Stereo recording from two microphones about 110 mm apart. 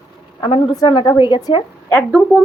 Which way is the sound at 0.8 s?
40° left (ahead or behind).